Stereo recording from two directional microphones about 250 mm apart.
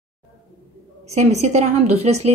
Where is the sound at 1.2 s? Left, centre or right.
Right.